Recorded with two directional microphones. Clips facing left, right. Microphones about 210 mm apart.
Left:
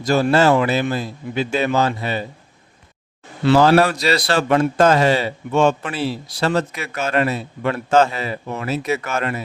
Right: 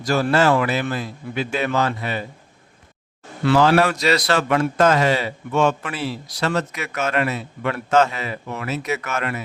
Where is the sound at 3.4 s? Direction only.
35° left (ahead or behind).